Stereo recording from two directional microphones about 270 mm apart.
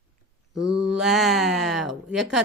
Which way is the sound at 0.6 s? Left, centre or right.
Right.